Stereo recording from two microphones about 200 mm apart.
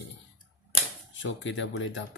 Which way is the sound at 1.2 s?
65° left (ahead or behind).